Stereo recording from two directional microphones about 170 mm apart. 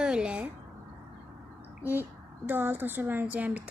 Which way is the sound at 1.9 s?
10° right (ahead or behind).